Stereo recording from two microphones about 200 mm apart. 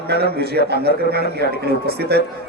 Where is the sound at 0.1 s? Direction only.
50° right (ahead or behind).